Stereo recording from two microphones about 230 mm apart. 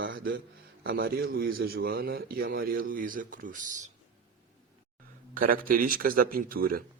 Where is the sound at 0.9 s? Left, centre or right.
Right.